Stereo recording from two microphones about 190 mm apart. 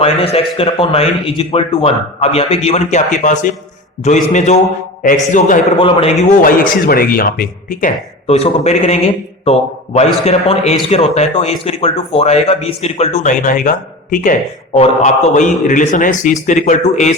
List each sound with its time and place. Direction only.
0.0 s a man's voice: 30° left (ahead or behind)
5.8 s a man's voice: 30° left (ahead or behind)